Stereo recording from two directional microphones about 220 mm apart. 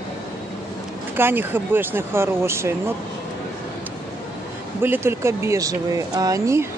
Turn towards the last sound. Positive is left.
turn(degrees=-15)  # may be behind; listen again after turning